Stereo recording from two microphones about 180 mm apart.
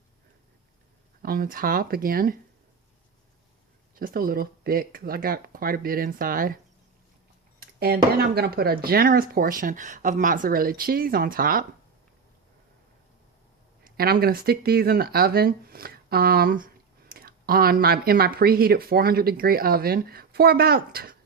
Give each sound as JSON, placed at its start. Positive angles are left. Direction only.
{"t": 1.2, "sound": "speech", "side_deg": -55}
{"t": 3.9, "sound": "speech", "side_deg": -55}
{"t": 7.6, "sound": "a sound", "side_deg": -60}
{"t": 8.2, "sound": "speech", "side_deg": -60}
{"t": 13.8, "sound": "speech", "side_deg": -55}